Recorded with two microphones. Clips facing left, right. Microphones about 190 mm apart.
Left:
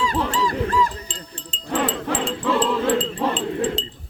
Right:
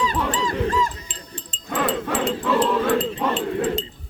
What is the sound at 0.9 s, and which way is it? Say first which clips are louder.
Wind chime: left 2 dB; 25° left (ahead or behind).